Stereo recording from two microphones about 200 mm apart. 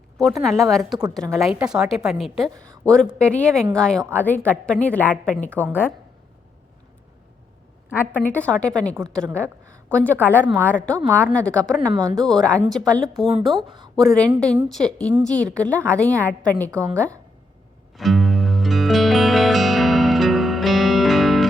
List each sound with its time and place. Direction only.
0.2 s a woman's voice: centre (ahead or behind)
7.9 s a woman's voice: 10° left (ahead or behind)
11.9 s speech: 20° right (ahead or behind)
12.2 s speech: 5° left (ahead or behind)
13.5 s speech: 25° right (ahead or behind)
13.9 s a woman's voice: 5° left (ahead or behind)
17.9 s music: centre (ahead or behind)